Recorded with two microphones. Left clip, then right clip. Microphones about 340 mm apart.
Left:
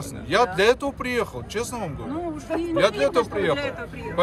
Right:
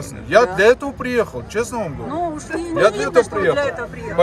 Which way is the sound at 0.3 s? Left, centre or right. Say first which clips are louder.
Right 6 dB; centre.